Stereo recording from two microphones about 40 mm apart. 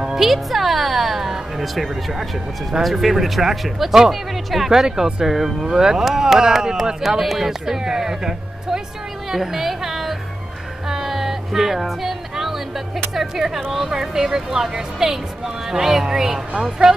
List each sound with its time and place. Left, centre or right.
0.0 s music: centre
2.8 s speech: centre
10.9 s music: centre
13.1 s speech: centre